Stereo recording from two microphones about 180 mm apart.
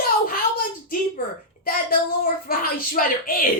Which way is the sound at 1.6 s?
55° left (ahead or behind).